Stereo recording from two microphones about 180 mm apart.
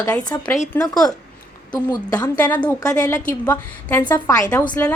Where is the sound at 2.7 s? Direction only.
20° left (ahead or behind).